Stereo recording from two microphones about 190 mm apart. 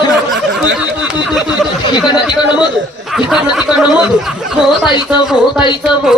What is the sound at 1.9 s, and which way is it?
Speech, 25° left (ahead or behind).